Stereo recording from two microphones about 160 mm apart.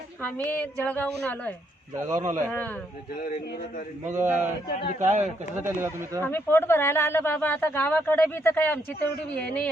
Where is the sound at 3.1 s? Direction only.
70° left (ahead or behind).